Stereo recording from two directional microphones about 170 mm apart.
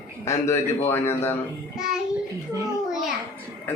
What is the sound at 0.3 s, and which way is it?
A man's voice, 15° left (ahead or behind).